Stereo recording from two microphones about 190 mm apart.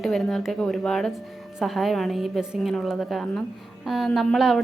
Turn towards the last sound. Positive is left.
turn(degrees=0)  # may be behind; listen again after turning